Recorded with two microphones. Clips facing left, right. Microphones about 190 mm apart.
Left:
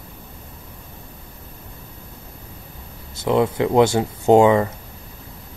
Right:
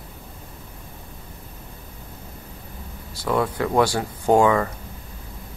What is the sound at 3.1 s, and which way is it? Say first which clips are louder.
Speech: left 4 dB; 25° left (ahead or behind).